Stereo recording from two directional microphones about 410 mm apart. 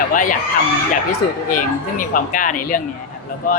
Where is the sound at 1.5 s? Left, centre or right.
Centre.